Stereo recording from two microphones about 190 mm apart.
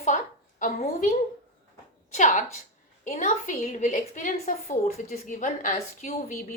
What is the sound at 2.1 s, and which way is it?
A woman's voice, 40° left (ahead or behind).